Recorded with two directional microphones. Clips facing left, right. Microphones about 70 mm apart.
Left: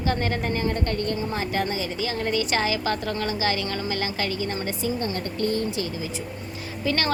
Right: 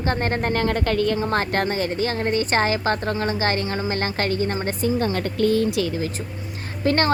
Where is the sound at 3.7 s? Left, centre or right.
Right.